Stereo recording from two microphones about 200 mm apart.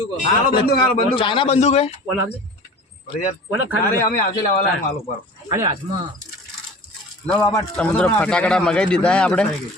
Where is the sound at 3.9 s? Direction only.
45° left (ahead or behind).